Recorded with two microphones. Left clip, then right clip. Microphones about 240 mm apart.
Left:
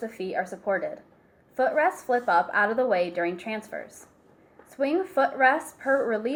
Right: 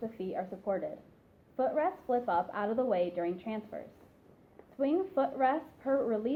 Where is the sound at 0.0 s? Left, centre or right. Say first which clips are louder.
Left 7 dB; left.